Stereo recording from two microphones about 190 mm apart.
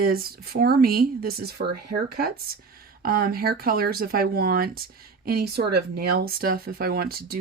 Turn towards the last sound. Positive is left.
turn(degrees=-55)  # may be behind; listen again after turning